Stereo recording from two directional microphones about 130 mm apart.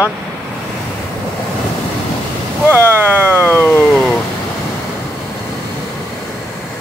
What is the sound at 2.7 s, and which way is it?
Speech, 15° right (ahead or behind).